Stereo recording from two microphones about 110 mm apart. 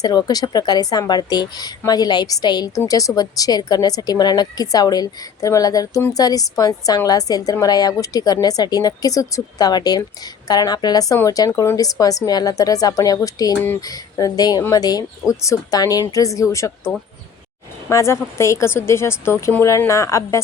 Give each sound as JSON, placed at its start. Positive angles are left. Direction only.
{"t": 0.0, "sound": "a woman's voice", "side_deg": 35}